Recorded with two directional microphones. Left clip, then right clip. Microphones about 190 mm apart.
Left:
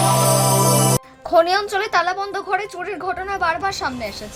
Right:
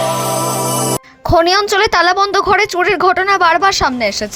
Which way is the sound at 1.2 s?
35° right (ahead or behind).